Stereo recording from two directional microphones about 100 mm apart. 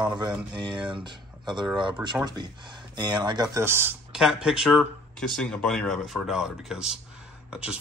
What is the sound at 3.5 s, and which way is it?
Speech, 25° right (ahead or behind).